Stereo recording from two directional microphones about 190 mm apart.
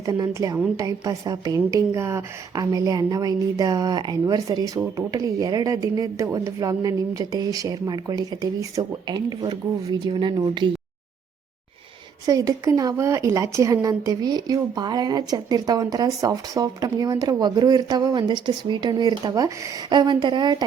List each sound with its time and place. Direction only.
0.0 s a woman's voice: 20° right (ahead or behind)
12.2 s a woman's voice: 20° right (ahead or behind)